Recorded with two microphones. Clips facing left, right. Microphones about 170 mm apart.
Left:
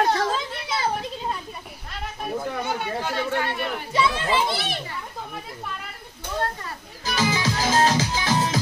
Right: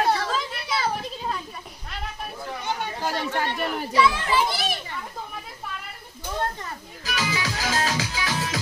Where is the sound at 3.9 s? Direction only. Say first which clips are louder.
Right 1 dB; 25° left (ahead or behind).